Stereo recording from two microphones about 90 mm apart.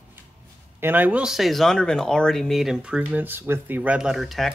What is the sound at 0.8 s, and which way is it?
Speech, 20° right (ahead or behind).